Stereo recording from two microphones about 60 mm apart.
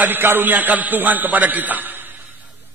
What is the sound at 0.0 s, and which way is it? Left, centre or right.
A man's voice, right.